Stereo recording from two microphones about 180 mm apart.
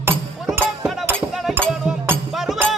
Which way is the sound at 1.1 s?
Centre (ahead or behind).